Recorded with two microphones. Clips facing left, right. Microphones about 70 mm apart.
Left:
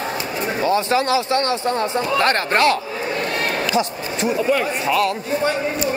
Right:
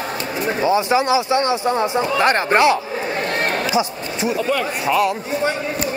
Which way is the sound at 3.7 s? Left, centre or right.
Centre.